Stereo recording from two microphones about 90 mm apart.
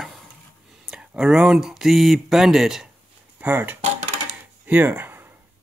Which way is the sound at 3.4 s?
20° right (ahead or behind).